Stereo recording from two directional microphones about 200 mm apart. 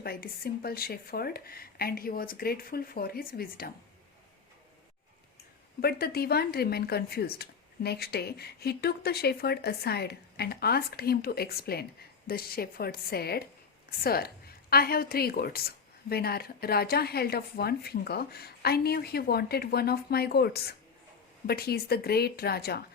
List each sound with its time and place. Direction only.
0.0 s speech: 50° left (ahead or behind)
5.8 s speech: 50° left (ahead or behind)